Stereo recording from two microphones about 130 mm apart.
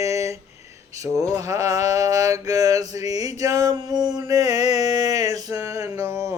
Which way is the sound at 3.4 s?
30° right (ahead or behind).